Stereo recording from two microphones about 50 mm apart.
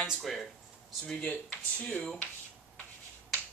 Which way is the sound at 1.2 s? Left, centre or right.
Left.